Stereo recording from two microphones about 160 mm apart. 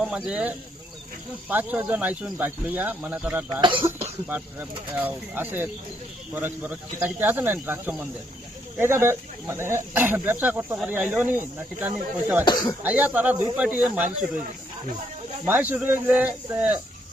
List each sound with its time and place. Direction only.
0.0 s speech: 5° right (ahead or behind)
3.6 s speech: 30° right (ahead or behind)
4.9 s speech: 10° right (ahead or behind)
12.5 s speech: 25° left (ahead or behind)
12.8 s speech: 10° right (ahead or behind)
15.4 s speech: 10° right (ahead or behind)